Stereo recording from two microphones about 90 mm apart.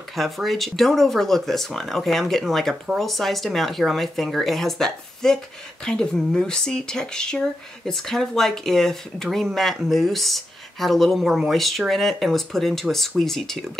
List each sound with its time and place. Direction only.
0.1 s speech: centre (ahead or behind)